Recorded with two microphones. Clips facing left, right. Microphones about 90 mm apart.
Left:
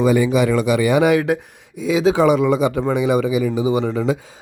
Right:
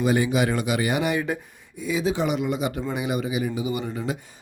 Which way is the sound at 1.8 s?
90° left.